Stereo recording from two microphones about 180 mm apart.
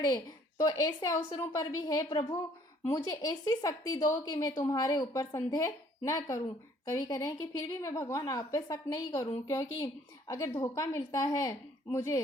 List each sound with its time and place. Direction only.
0.6 s a woman's voice: 20° left (ahead or behind)